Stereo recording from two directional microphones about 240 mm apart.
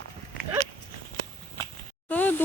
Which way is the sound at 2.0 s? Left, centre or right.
Centre.